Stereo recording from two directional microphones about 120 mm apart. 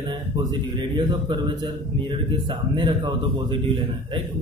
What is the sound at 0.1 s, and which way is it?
A man's voice, 40° right (ahead or behind).